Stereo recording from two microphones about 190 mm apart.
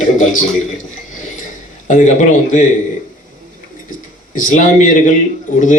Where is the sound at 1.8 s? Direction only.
40° left (ahead or behind).